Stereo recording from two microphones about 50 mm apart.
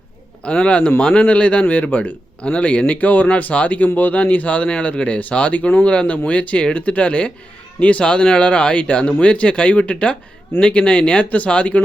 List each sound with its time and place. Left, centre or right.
0.4 s a man's voice: left